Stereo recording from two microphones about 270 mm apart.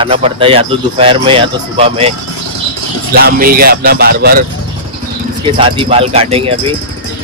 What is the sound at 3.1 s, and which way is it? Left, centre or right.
Speech, right.